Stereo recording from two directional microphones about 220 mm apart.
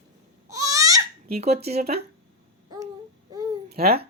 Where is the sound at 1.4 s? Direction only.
30° right (ahead or behind).